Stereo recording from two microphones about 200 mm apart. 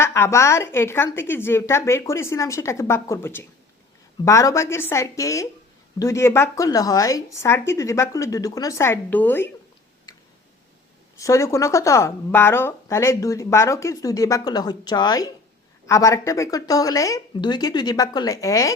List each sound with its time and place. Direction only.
0.0 s a woman's voice: 15° left (ahead or behind)
11.2 s a woman's voice: 15° left (ahead or behind)